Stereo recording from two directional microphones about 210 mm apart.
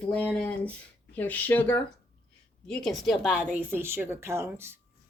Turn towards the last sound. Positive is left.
turn(degrees=-10)  # may be behind; listen again after turning